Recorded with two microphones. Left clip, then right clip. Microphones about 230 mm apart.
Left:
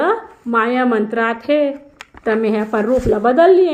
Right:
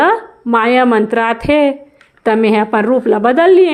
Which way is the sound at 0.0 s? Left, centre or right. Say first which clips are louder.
Right 5 dB; right.